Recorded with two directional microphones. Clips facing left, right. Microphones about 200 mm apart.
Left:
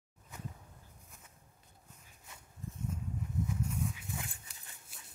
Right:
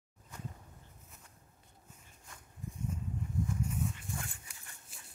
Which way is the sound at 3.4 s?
5° left (ahead or behind).